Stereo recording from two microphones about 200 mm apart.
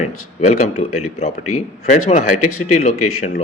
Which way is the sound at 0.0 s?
35° left (ahead or behind).